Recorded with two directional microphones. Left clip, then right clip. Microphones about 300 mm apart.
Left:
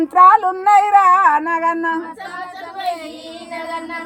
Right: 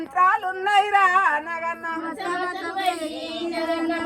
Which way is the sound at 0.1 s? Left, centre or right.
Left.